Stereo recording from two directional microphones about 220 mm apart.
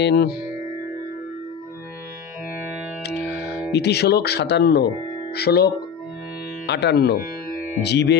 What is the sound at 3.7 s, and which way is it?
Speech, 50° left (ahead or behind).